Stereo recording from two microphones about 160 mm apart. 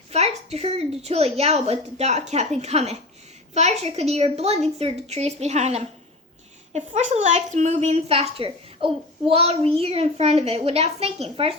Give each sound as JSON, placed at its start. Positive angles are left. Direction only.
{"t": 0.1, "sound": "a woman's voice", "side_deg": -40}